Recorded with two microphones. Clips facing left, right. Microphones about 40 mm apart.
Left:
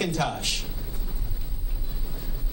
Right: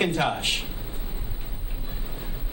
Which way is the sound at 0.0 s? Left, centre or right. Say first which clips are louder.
Right 3 dB; right.